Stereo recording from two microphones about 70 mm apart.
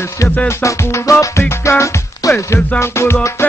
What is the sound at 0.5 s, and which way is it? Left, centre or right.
Music, left.